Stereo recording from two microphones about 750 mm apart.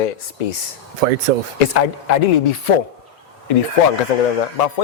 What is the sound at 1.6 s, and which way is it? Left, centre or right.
Speech, left.